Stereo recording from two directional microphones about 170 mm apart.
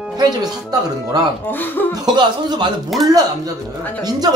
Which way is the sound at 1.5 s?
10° left (ahead or behind).